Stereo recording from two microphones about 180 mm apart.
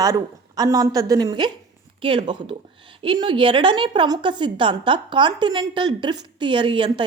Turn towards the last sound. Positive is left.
turn(degrees=-25)  # may be behind; listen again after turning